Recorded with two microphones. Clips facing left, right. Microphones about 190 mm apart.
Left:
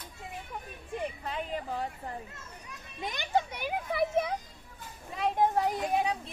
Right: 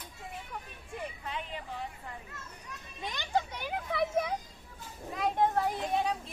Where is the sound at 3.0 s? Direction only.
15° left (ahead or behind).